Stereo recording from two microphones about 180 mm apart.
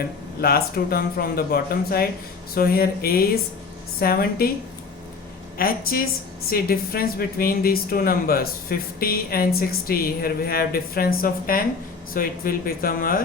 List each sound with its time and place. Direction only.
0.0 s a woman's voice: 60° left (ahead or behind)
5.5 s a woman's voice: 55° left (ahead or behind)